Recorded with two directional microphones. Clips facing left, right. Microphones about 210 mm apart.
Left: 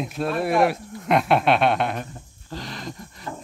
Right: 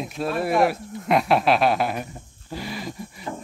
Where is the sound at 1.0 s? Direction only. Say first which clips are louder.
Even; centre (ahead or behind).